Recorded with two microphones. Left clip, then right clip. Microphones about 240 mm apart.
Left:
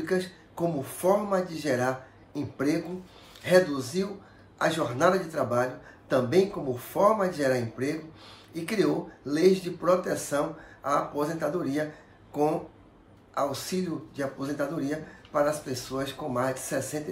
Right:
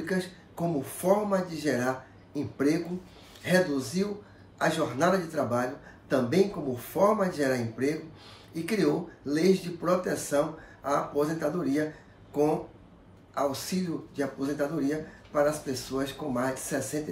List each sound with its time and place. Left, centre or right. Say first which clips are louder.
0.0 s a man's voice: left 3 dB; centre
13.3 s a man's voice: left 1 dB; centre